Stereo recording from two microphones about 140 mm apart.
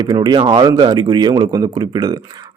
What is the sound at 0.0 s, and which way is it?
A man's voice, 30° right (ahead or behind).